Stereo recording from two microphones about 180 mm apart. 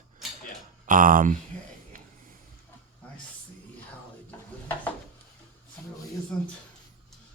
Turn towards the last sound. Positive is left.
turn(degrees=5)  # may be behind; listen again after turning